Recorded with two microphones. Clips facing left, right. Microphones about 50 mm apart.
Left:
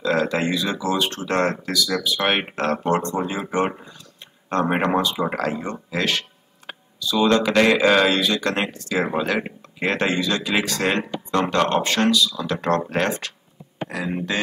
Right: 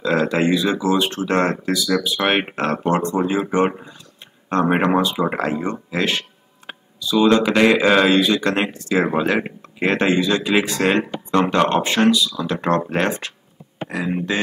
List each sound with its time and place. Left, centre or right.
0.0 s speech: centre